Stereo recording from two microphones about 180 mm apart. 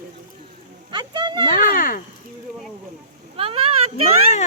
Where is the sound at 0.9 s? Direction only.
25° right (ahead or behind).